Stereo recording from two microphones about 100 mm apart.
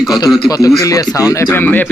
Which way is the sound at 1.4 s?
20° left (ahead or behind).